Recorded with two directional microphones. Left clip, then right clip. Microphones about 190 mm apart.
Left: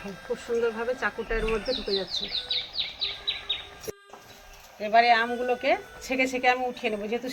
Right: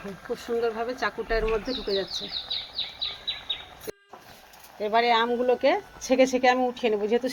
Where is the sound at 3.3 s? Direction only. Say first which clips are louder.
Left 3 dB; centre (ahead or behind).